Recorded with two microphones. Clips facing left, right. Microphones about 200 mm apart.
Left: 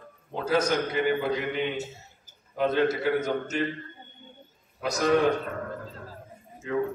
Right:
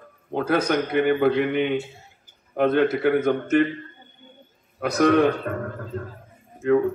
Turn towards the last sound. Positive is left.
turn(degrees=-60)  # may be behind; listen again after turning